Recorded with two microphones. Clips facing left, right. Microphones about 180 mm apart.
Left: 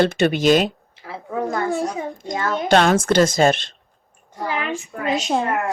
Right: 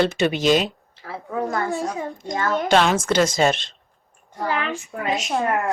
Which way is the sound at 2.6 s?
45° left (ahead or behind).